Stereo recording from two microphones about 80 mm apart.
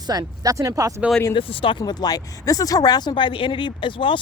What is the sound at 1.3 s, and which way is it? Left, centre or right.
Speech, left.